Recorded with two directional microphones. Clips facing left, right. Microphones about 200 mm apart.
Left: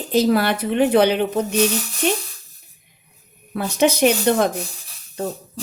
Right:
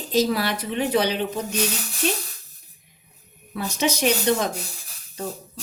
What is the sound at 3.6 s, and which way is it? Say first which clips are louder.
Speech: left 7 dB; 55° left (ahead or behind).